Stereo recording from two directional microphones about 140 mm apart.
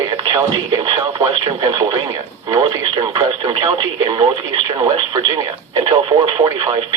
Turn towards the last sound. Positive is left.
turn(degrees=-25)  # may be behind; listen again after turning